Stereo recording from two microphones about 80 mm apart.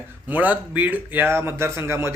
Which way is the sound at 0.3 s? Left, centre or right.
Centre.